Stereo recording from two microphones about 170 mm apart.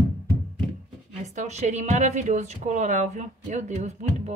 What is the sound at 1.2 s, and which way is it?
A woman's voice, 45° right (ahead or behind).